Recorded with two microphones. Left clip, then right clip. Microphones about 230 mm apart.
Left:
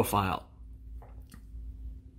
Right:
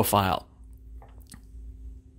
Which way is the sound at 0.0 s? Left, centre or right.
Right.